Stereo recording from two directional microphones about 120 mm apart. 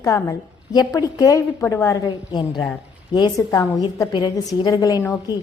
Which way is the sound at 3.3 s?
30° left (ahead or behind).